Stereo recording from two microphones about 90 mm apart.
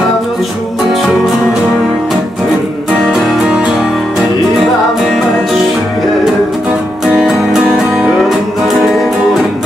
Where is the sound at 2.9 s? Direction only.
Centre (ahead or behind).